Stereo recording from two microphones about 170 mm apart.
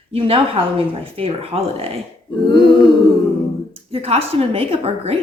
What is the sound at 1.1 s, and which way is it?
Speech, 35° right (ahead or behind).